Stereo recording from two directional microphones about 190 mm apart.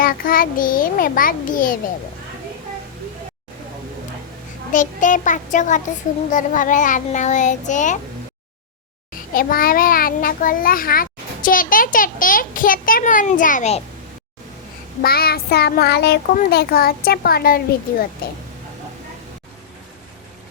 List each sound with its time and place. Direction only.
0.0 s a child's voice: 50° left (ahead or behind)
4.7 s a child's voice: 40° left (ahead or behind)
9.3 s a child's voice: 50° left (ahead or behind)
15.0 s a child's voice: 55° left (ahead or behind)